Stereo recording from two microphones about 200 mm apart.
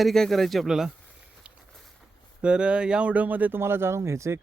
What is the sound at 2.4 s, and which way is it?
Speech, 5° right (ahead or behind).